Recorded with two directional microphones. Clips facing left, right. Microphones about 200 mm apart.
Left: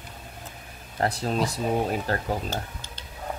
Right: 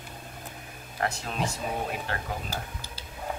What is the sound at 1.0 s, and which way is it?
Speech, 35° left (ahead or behind).